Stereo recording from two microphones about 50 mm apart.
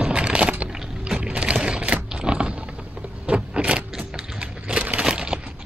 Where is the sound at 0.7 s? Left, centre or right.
Centre.